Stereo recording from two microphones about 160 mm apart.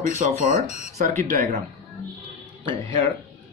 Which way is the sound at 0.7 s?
45° left (ahead or behind).